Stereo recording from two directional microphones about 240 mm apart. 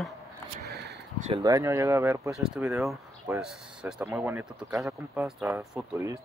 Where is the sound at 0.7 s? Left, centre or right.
Right.